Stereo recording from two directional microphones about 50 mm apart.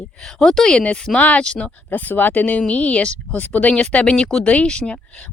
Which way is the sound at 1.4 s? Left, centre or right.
Centre.